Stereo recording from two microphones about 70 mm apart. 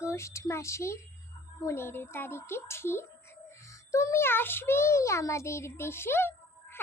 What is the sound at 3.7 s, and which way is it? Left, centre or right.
A child's voice, left.